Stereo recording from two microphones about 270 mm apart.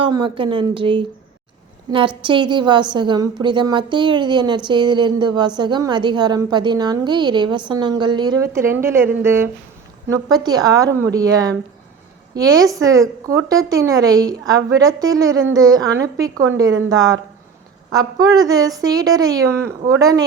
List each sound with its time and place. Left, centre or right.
0.0 s a woman's voice: centre
17.9 s a woman's voice: centre